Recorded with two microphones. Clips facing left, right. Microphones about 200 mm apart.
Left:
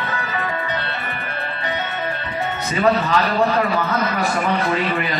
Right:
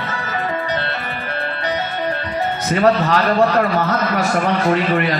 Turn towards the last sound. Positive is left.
turn(degrees=-55)  # may be behind; listen again after turning